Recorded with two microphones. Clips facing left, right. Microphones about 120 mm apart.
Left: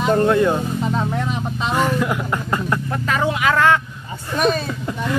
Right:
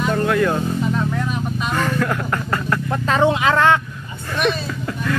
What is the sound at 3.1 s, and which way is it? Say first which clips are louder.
Speech: right 3 dB; 25° right (ahead or behind).